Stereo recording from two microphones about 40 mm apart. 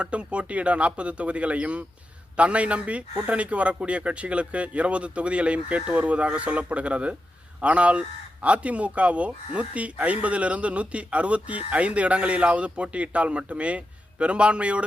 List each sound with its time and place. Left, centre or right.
0.0 s speech: right